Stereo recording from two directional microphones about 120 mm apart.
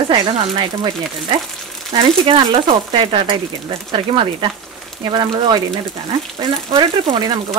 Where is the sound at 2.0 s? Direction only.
50° right (ahead or behind).